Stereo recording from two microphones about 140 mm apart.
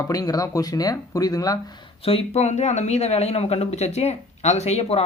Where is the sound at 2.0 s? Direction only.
45° left (ahead or behind).